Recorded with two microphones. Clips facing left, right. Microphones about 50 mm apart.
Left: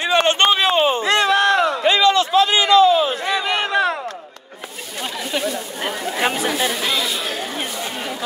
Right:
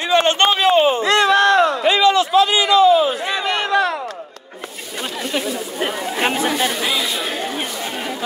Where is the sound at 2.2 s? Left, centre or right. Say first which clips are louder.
Right 1 dB; left.